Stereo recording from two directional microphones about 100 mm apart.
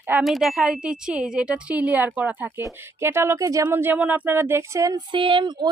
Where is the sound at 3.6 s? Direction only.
20° right (ahead or behind).